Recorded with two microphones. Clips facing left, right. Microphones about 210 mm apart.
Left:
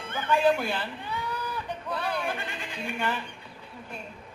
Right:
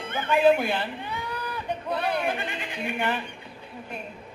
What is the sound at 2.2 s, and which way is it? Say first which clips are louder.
Speech: right 4 dB; 20° right (ahead or behind).